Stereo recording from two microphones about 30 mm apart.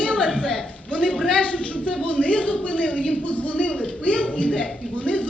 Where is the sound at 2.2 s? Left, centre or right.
Left.